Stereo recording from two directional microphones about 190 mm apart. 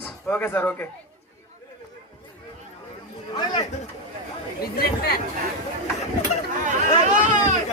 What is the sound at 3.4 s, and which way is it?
Speech, 20° left (ahead or behind).